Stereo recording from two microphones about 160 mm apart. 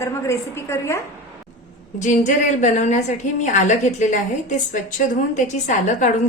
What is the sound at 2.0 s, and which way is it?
A woman's voice, 50° left (ahead or behind).